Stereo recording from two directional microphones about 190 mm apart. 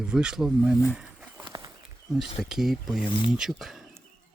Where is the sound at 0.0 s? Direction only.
5° right (ahead or behind).